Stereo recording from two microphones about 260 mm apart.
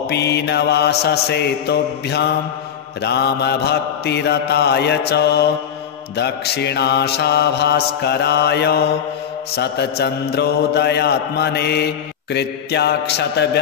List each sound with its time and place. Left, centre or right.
0.1 s mantra: left